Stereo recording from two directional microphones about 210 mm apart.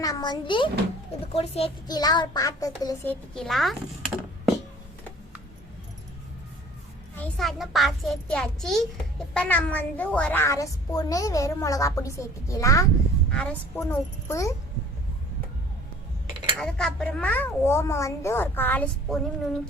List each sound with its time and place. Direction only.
0.0 s a child's voice: 20° left (ahead or behind); by 4.5 s centre (ahead or behind)
7.2 s a child's voice: centre (ahead or behind)
16.6 s a child's voice: 5° left (ahead or behind)